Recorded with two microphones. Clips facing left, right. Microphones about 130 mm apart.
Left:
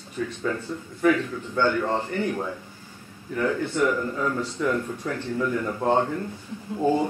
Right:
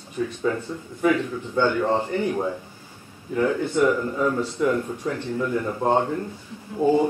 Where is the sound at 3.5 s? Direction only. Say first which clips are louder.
Right 2 dB; 15° right (ahead or behind).